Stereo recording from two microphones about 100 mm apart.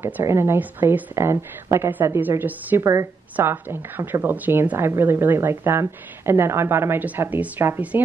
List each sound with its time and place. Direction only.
0.0 s a woman's voice: 25° right (ahead or behind)
2.8 s a woman's voice: 30° right (ahead or behind)
3.3 s a woman's voice: 20° right (ahead or behind)